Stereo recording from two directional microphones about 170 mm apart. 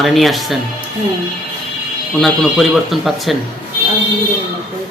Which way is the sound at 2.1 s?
Centre (ahead or behind).